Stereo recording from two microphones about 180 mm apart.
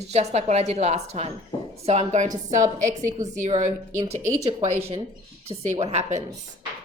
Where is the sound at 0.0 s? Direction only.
35° right (ahead or behind).